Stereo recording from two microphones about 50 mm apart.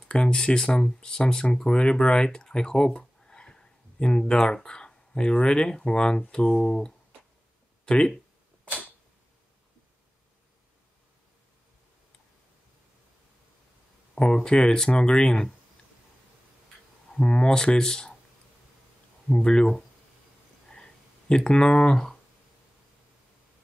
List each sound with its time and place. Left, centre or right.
0.1 s speech: centre
7.8 s a sound: centre
14.1 s speech: centre
17.2 s speech: centre
19.2 s speech: centre
20.7 s a sound: centre